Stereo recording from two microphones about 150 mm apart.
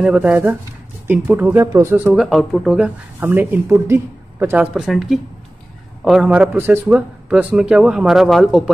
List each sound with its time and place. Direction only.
0.0 s speech: 10° right (ahead or behind)
2.1 s speech: centre (ahead or behind)
4.8 s a man's voice: centre (ahead or behind)